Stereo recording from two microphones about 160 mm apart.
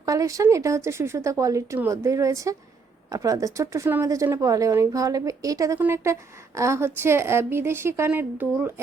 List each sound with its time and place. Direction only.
0.0 s speech: 20° right (ahead or behind)